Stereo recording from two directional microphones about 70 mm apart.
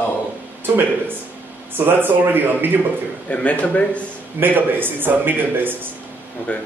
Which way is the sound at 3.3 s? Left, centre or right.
Centre.